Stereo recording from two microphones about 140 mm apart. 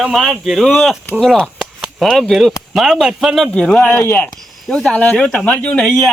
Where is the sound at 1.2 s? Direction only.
Centre (ahead or behind).